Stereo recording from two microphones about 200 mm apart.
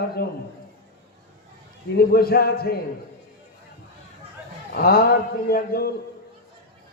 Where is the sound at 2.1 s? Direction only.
50° left (ahead or behind).